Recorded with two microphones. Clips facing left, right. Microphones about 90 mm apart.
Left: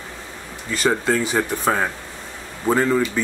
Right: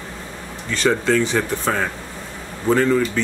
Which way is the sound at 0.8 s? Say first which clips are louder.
Right 2 dB; 10° left (ahead or behind).